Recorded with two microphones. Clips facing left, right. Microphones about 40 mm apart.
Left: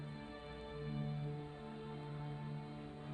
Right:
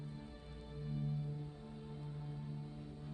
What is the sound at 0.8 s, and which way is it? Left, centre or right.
Music, left.